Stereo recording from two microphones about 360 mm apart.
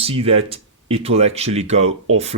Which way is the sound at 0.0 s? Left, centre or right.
Centre.